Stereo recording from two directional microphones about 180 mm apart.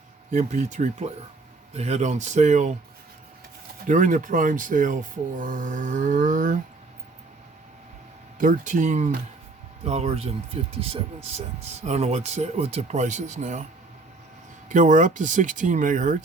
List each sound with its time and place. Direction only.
0.3 s speech: 40° right (ahead or behind)
3.8 s speech: 45° right (ahead or behind)
8.4 s speech: 45° right (ahead or behind)
14.7 s speech: 45° right (ahead or behind)